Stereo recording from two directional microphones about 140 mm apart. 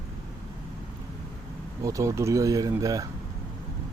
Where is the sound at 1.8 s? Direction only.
25° right (ahead or behind).